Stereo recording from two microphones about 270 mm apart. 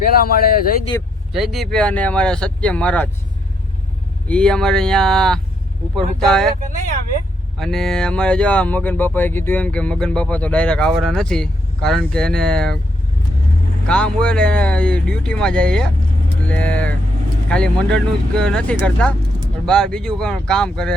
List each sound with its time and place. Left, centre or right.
0.0 s speech: left
1.3 s speech: centre
4.3 s speech: centre
7.6 s speech: centre
13.8 s speech: centre